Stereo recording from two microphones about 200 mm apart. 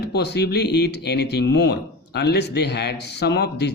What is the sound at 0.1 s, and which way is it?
Speech, 55° left (ahead or behind).